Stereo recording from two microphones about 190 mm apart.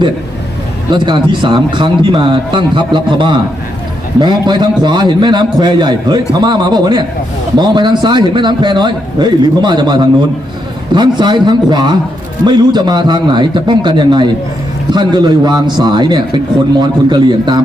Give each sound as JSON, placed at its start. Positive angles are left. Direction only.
{"t": 0.9, "sound": "a man's voice", "side_deg": -25}